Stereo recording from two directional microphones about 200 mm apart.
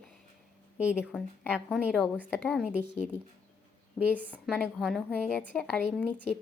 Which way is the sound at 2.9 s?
35° left (ahead or behind).